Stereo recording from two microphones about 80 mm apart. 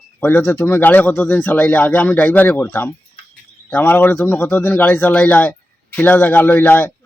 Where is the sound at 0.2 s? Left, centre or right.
Left.